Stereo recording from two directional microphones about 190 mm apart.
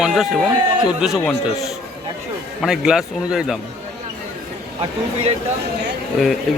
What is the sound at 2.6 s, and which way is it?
A man's voice, centre (ahead or behind).